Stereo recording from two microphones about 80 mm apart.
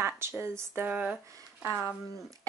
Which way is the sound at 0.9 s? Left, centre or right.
Centre.